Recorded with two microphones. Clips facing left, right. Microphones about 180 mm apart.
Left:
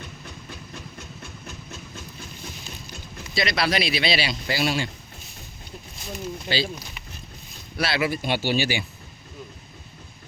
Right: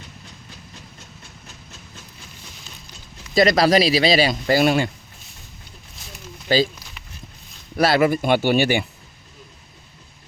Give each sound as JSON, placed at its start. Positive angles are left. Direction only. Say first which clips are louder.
{"t": 3.3, "sound": "speech", "louder": "right 9 dB", "side_deg": -40}
{"t": 6.5, "sound": "speech", "louder": "right 8 dB", "side_deg": -45}
{"t": 7.8, "sound": "speech", "louder": "right 8 dB", "side_deg": -45}